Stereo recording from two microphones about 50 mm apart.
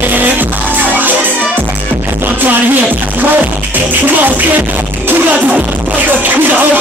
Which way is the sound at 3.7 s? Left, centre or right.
Right.